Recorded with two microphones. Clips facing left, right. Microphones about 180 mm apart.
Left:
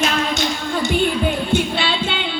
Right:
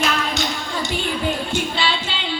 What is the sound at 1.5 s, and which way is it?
Music, 55° left (ahead or behind).